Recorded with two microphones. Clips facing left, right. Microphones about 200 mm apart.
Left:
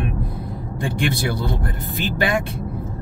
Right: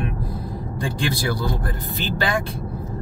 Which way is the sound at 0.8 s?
20° left (ahead or behind).